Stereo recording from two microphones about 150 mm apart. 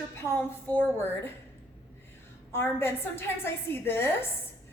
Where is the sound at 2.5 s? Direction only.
15° left (ahead or behind).